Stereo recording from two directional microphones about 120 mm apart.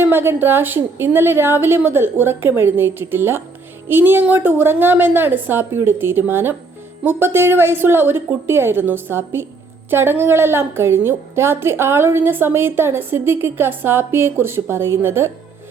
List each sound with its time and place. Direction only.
0.0 s a woman's voice: 20° right (ahead or behind)